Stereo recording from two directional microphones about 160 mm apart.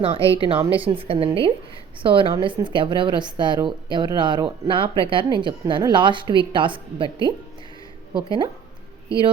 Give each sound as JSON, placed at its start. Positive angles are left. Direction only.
{"t": 0.0, "sound": "speech", "side_deg": -35}
{"t": 0.6, "sound": "speech", "side_deg": -10}
{"t": 0.9, "sound": "a woman's voice", "side_deg": -35}